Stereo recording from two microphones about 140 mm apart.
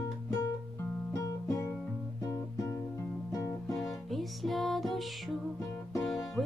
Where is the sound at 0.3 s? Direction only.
20° left (ahead or behind).